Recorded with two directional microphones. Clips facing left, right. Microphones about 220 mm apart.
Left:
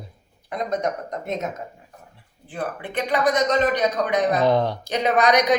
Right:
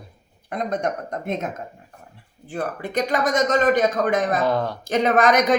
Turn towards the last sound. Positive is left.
turn(degrees=-50)  # may be behind; listen again after turning